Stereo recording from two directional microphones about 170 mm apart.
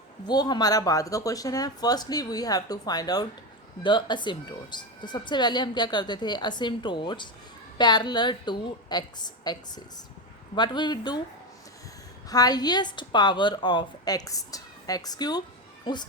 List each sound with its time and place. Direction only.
0.3 s a woman's voice: 25° left (ahead or behind)
12.3 s a woman's voice: 20° left (ahead or behind)